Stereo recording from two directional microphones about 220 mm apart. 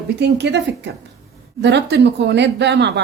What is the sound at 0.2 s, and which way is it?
Speech, 50° right (ahead or behind).